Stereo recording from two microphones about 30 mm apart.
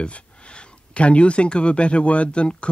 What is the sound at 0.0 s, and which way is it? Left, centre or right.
Speech, left.